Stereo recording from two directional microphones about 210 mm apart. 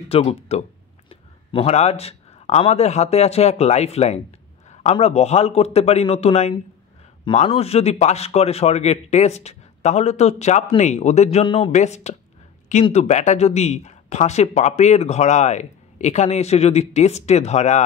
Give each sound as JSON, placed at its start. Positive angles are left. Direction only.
{"t": 0.1, "sound": "a man's voice", "side_deg": 30}